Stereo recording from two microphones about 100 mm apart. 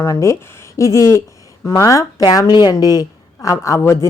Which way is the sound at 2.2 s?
40° left (ahead or behind).